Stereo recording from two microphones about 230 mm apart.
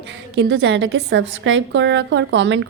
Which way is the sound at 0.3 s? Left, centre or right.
Right.